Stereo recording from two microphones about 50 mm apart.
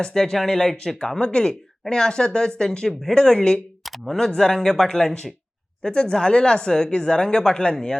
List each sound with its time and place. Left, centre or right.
0.0 s speech: centre
3.8 s speech: centre